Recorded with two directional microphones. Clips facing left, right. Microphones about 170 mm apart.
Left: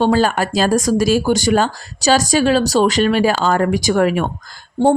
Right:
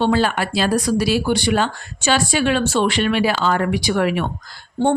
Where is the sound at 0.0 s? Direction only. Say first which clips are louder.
Left 3 dB; 45° left (ahead or behind).